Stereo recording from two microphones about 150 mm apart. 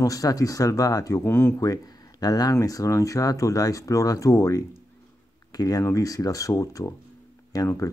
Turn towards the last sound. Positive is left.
turn(degrees=20)  # may be behind; listen again after turning